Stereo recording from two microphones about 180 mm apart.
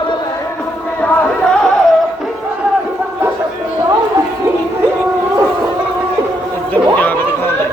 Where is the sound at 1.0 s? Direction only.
5° left (ahead or behind).